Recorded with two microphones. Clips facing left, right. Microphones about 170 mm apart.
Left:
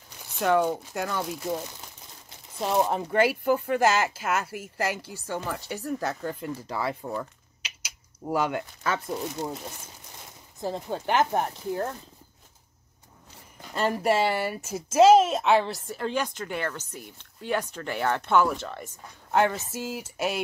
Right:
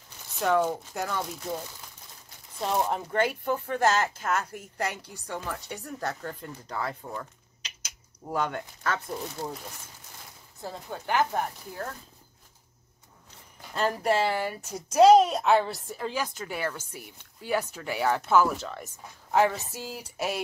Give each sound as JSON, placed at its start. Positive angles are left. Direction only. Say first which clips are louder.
{"t": 0.7, "sound": "a woman's voice", "louder": "left 2 dB", "side_deg": 0}
{"t": 2.6, "sound": "speech", "louder": "left 3 dB", "side_deg": 5}
{"t": 10.6, "sound": "speech", "louder": "left 7 dB", "side_deg": 25}
{"t": 14.0, "sound": "a woman's voice", "louder": "left 2 dB", "side_deg": 10}